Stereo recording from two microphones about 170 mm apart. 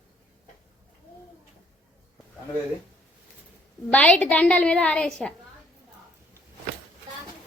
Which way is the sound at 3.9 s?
10° left (ahead or behind).